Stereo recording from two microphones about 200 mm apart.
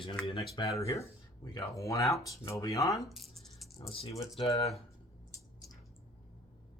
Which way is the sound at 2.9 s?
Centre (ahead or behind).